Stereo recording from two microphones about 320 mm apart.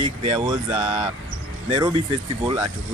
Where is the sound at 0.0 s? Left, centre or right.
Centre.